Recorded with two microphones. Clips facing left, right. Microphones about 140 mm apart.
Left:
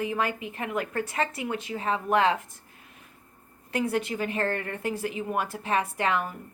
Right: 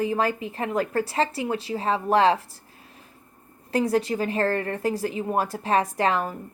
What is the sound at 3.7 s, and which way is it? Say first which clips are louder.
A woman's voice: right 5 dB; 35° right (ahead or behind).